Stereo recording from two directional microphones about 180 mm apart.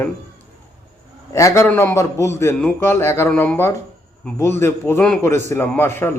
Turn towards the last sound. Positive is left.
turn(degrees=10)  # may be behind; listen again after turning